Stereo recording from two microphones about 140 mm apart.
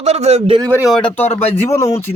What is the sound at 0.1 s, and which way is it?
Speech, 45° right (ahead or behind).